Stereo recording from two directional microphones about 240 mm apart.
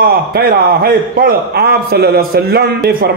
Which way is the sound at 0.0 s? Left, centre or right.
Right.